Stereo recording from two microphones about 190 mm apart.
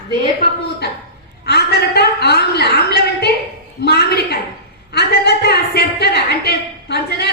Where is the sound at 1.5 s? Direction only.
55° left (ahead or behind).